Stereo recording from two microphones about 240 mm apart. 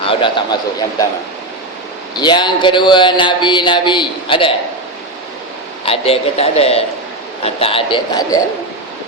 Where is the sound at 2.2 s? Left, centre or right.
Centre.